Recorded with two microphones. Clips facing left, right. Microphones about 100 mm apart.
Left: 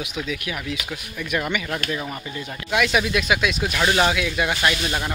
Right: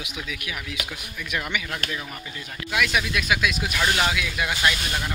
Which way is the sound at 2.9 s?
15° left (ahead or behind).